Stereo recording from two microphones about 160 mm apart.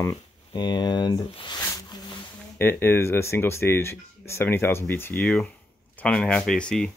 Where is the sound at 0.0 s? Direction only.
25° left (ahead or behind).